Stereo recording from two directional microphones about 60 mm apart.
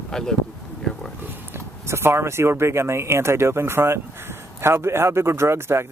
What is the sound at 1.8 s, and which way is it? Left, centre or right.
Speech, right.